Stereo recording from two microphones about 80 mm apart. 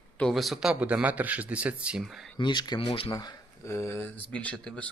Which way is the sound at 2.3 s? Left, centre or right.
Left.